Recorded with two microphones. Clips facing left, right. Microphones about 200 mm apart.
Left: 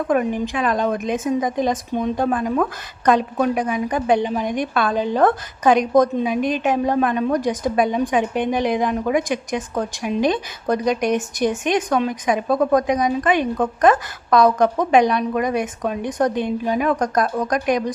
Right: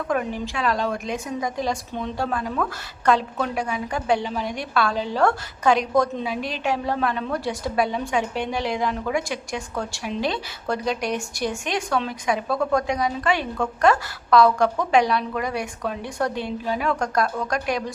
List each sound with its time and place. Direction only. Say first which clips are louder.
0.1 s a woman's voice: left 6 dB; 15° left (ahead or behind)